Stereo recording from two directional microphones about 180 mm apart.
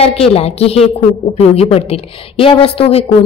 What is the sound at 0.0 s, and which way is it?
A woman's voice, 35° left (ahead or behind).